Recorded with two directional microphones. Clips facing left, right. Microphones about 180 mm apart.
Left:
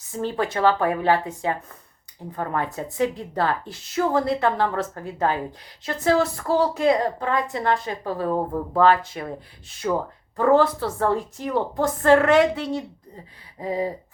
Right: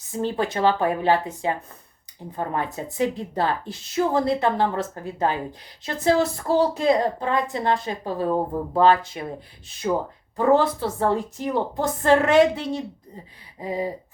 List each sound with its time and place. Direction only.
0.2 s speech: 20° right (ahead or behind)
13.6 s gasp: 15° right (ahead or behind)